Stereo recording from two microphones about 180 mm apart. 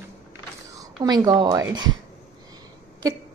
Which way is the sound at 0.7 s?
20° right (ahead or behind).